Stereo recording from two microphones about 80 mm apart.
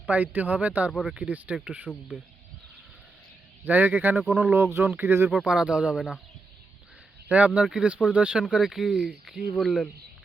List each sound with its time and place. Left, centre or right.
0.0 s speech: centre
3.6 s speech: right
5.5 s speech: centre
7.3 s speech: centre